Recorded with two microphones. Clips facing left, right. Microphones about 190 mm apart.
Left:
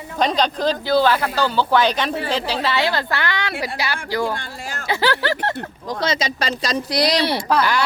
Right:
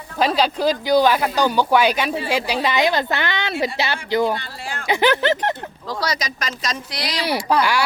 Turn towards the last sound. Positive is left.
turn(degrees=-10)  # may be behind; listen again after turning